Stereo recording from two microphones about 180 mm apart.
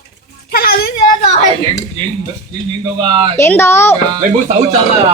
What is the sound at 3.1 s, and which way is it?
Speech, 25° right (ahead or behind).